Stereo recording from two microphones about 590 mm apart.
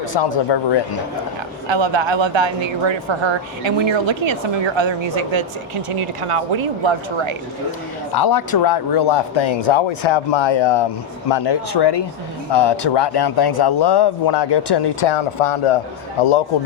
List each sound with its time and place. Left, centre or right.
0.1 s speech: left
1.6 s speech: right
8.1 s speech: left